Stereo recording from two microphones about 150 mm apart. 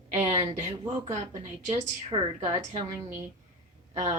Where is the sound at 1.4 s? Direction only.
55° right (ahead or behind).